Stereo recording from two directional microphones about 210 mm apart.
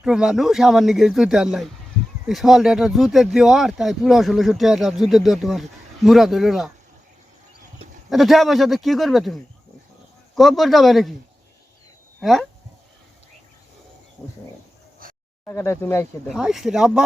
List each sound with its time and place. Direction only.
0.0 s speech: 5° right (ahead or behind)
8.1 s speech: centre (ahead or behind)
12.2 s speech: centre (ahead or behind)
14.2 s speech: 10° left (ahead or behind)
15.0 s a sound: 40° right (ahead or behind)
15.4 s speech: 10° left (ahead or behind)
16.2 s speech: centre (ahead or behind)